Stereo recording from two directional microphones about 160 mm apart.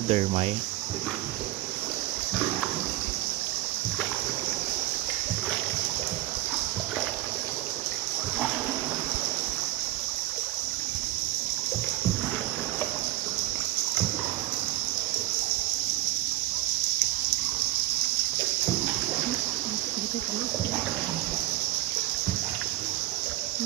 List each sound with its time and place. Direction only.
0.1 s speech: 35° right (ahead or behind)